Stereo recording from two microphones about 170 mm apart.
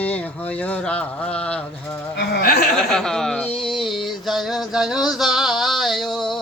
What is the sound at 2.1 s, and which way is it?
Speech, 75° left (ahead or behind).